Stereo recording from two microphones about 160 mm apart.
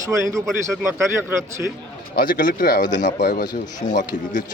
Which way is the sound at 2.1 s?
65° left (ahead or behind).